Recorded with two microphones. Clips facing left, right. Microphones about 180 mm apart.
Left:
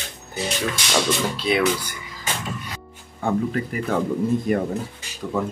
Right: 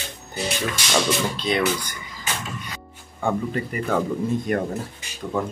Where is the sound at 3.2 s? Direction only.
Centre (ahead or behind).